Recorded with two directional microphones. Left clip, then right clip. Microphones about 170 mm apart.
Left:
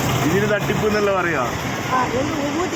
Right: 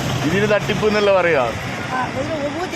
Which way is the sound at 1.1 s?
45° right (ahead or behind).